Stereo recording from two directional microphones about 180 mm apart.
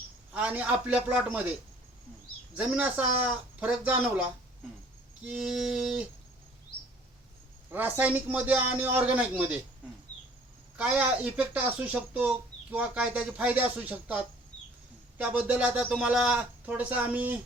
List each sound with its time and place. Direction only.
0.3 s speech: 10° right (ahead or behind)
2.6 s speech: 5° right (ahead or behind)
5.2 s music: 5° right (ahead or behind)
7.7 s speech: 10° right (ahead or behind)
10.8 s speech: 10° right (ahead or behind)